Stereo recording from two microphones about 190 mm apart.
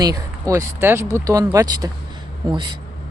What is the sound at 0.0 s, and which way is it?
Speech, 15° right (ahead or behind).